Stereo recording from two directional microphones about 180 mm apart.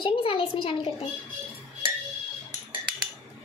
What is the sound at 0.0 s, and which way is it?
Speech, 30° left (ahead or behind).